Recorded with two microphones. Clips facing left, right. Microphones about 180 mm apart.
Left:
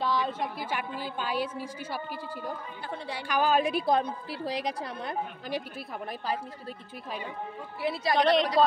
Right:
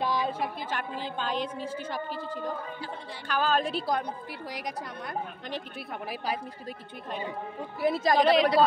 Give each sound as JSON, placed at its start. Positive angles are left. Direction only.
{"t": 0.0, "sound": "a sound", "side_deg": -10}
{"t": 0.6, "sound": "a woman's voice", "side_deg": 10}
{"t": 7.8, "sound": "a woman's voice", "side_deg": -45}
{"t": 8.2, "sound": "a woman's voice", "side_deg": -5}